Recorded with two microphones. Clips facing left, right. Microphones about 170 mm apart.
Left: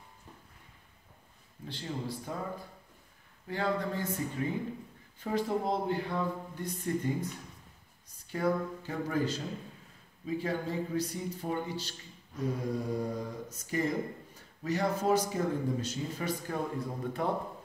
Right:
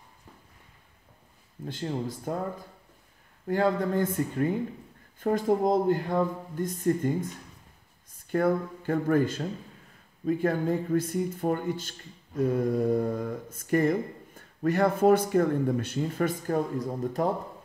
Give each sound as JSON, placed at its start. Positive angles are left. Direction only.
{"t": 1.7, "sound": "speech", "side_deg": -50}
{"t": 3.4, "sound": "speech", "side_deg": -50}
{"t": 8.3, "sound": "speech", "side_deg": -55}